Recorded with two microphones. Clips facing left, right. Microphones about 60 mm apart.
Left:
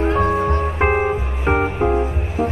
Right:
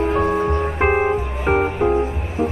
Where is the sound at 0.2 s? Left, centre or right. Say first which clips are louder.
Left 1 dB; left.